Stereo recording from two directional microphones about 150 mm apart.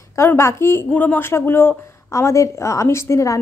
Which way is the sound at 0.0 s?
20° left (ahead or behind).